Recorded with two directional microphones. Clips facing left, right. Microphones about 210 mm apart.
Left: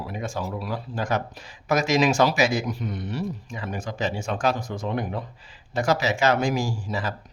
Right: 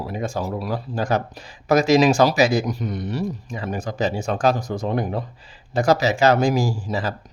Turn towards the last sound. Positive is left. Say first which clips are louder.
# right 4 dB
turn(degrees=-35)  # may be behind; listen again after turning